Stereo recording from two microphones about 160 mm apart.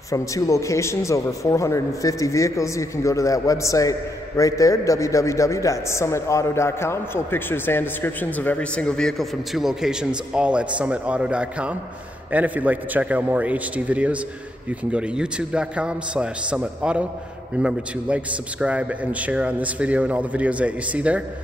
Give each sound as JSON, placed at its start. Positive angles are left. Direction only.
{"t": 0.1, "sound": "a man's voice", "side_deg": 20}